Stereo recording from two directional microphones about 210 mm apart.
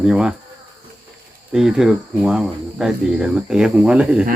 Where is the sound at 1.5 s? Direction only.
Centre (ahead or behind).